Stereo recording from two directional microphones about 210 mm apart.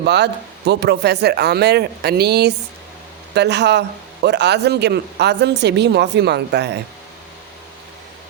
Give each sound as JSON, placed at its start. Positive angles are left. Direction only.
{"t": 0.0, "sound": "speech", "side_deg": -55}